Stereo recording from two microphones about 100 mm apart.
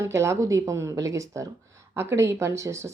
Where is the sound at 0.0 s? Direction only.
30° right (ahead or behind).